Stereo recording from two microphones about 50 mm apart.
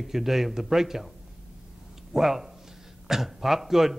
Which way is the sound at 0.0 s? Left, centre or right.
Centre.